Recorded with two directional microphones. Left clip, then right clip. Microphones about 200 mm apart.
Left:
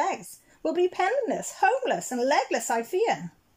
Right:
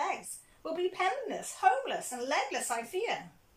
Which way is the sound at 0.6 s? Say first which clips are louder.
Left 8 dB; 40° left (ahead or behind).